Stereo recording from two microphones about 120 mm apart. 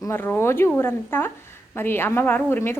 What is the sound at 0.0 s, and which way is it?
A woman's voice, 20° left (ahead or behind).